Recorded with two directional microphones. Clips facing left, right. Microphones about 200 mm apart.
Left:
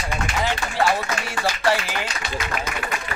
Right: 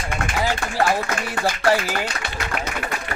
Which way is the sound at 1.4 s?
45° right (ahead or behind).